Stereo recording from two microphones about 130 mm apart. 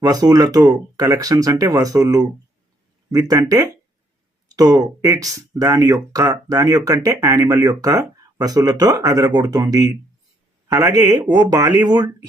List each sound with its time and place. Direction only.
0.1 s speech: 30° right (ahead or behind)